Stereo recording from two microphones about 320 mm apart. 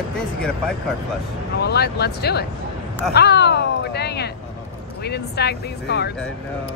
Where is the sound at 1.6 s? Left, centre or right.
Left.